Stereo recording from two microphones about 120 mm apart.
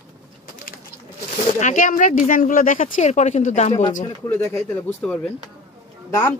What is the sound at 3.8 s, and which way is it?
Speech, 90° left.